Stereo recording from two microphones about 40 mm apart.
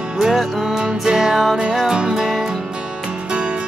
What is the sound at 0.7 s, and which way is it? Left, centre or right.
Music, centre.